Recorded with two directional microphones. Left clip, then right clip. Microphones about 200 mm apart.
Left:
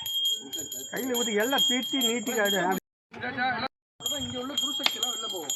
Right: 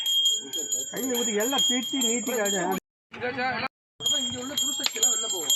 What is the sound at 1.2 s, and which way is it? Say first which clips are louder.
Speech: even; 5° left (ahead or behind).